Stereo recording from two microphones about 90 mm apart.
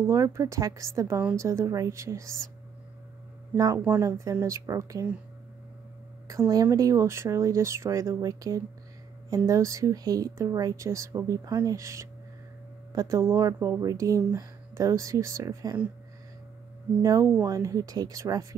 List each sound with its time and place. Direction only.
0.0 s speech: 35° right (ahead or behind)
3.5 s speech: 40° right (ahead or behind)
6.2 s speech: 40° right (ahead or behind)
17.0 s speech: 40° right (ahead or behind)